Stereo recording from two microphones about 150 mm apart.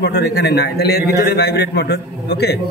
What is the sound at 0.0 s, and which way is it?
A man's voice, 90° left.